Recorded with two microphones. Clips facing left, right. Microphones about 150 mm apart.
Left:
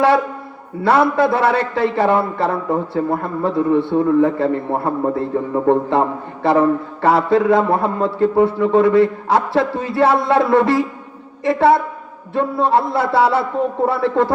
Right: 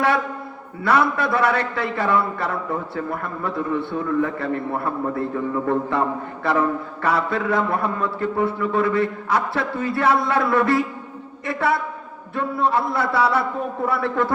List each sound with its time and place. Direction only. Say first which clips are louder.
0.9 s a man's voice: left 5 dB; 25° left (ahead or behind)